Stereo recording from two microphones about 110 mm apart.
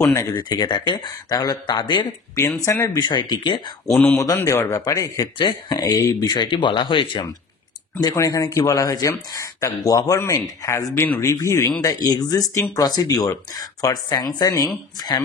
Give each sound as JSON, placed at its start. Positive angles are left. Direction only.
{"t": 0.0, "sound": "speech", "side_deg": 30}
{"t": 2.6, "sound": "a man's voice", "side_deg": 30}
{"t": 3.0, "sound": "speech", "side_deg": 45}
{"t": 3.9, "sound": "speech", "side_deg": 15}
{"t": 4.2, "sound": "a man's voice", "side_deg": 30}
{"t": 6.7, "sound": "speech", "side_deg": 50}
{"t": 8.0, "sound": "speech", "side_deg": 35}